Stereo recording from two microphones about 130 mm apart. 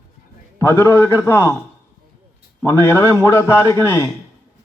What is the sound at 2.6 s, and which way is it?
A man's voice, 20° left (ahead or behind).